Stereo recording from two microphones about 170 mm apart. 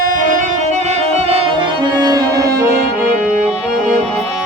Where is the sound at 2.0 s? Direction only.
20° right (ahead or behind).